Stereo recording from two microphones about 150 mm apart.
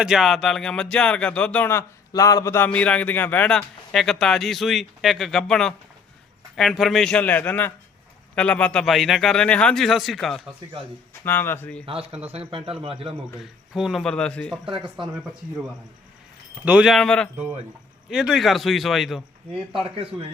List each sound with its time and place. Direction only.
0.0 s speech: 5° right (ahead or behind)
11.3 s speech: 15° left (ahead or behind)
12.3 s a man's voice: 35° right (ahead or behind)
13.4 s speech: 5° right (ahead or behind)
15.0 s a man's voice: 35° right (ahead or behind)
16.6 s speech: 5° right (ahead or behind)
19.7 s a man's voice: 40° right (ahead or behind)